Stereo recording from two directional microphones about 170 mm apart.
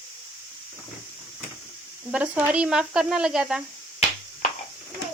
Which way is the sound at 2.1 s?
10° right (ahead or behind).